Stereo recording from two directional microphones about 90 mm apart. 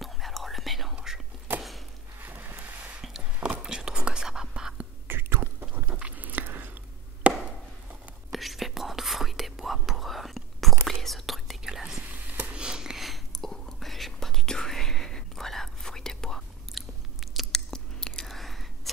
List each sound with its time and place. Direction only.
0.0 s whispering: centre (ahead or behind)
2.1 s a sound: 20° right (ahead or behind)
3.0 s a sound: 5° right (ahead or behind)
3.6 s whispering: 10° right (ahead or behind)
5.0 s chewing: 25° right (ahead or behind)
8.3 s whispering: centre (ahead or behind)
12.3 s whispering: 20° right (ahead or behind); by 18.7 s centre (ahead or behind)